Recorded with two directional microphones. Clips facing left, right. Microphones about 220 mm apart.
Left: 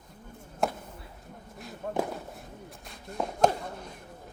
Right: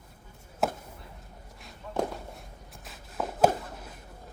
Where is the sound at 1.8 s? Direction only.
55° left (ahead or behind).